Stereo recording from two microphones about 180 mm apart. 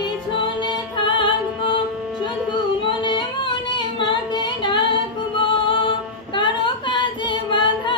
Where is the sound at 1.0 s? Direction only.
25° left (ahead or behind).